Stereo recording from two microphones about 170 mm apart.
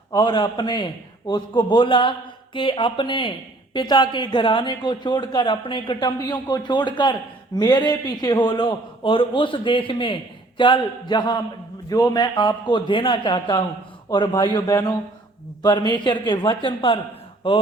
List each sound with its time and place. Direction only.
0.1 s a man's voice: 30° left (ahead or behind)
15.9 s a man's voice: 25° left (ahead or behind)